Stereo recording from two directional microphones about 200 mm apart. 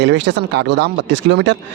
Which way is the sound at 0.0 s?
60° right (ahead or behind).